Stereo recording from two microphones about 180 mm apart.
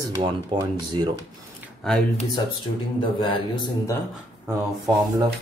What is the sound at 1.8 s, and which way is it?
Speech, centre (ahead or behind).